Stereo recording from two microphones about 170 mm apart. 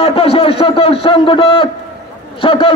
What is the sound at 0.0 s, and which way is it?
A man's voice, 35° left (ahead or behind).